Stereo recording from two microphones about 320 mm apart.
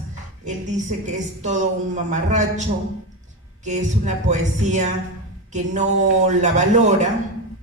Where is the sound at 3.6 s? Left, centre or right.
Right.